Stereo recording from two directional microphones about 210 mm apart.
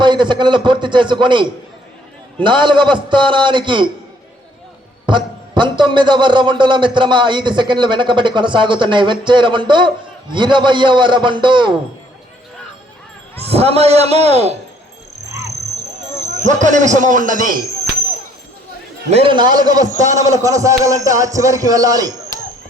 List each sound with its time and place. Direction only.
0.0 s a man's voice: 20° right (ahead or behind)
5.0 s a man's voice: 20° right (ahead or behind)
13.4 s a man's voice: 30° right (ahead or behind)
16.4 s speech: 35° right (ahead or behind)
19.1 s a man's voice: 25° right (ahead or behind)